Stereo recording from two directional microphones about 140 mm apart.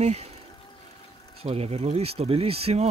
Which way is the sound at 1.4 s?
45° right (ahead or behind).